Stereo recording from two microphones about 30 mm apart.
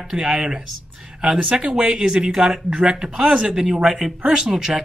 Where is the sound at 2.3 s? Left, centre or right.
Centre.